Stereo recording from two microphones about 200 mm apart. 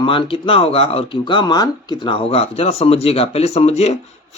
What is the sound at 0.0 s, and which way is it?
Speech, 25° left (ahead or behind).